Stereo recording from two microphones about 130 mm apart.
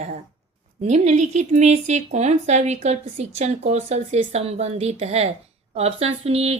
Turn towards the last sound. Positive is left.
turn(degrees=-50)  # may be behind; listen again after turning